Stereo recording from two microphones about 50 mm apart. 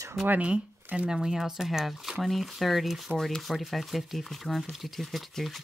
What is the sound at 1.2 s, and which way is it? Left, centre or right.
Speech, centre.